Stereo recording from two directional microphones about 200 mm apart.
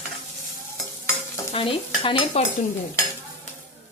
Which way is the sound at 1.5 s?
25° left (ahead or behind).